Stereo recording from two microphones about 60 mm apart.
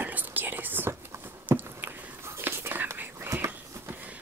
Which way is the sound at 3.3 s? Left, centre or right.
Right.